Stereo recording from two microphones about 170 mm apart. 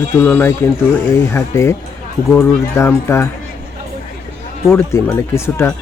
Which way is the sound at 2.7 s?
15° left (ahead or behind).